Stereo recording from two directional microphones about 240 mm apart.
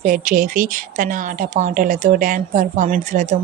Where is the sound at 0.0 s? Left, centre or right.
Right.